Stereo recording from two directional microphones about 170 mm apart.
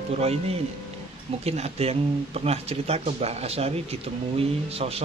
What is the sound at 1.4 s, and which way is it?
Speech, 35° right (ahead or behind).